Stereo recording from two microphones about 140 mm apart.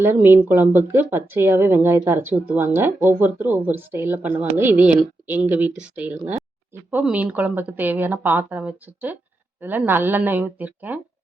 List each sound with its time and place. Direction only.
0.0 s speech: 15° right (ahead or behind)